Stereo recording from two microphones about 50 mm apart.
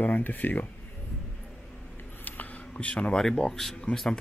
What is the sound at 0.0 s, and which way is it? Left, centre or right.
Speech, left.